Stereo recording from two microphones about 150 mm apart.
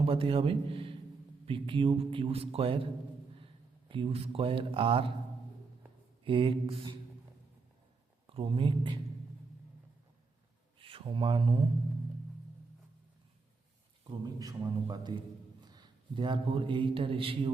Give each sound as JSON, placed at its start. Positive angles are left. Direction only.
{"t": 0.0, "sound": "a man's voice", "side_deg": -40}
{"t": 6.2, "sound": "speech", "side_deg": -35}
{"t": 8.3, "sound": "speech", "side_deg": -35}
{"t": 10.8, "sound": "speech", "side_deg": -35}
{"t": 14.3, "sound": "a man's voice", "side_deg": -25}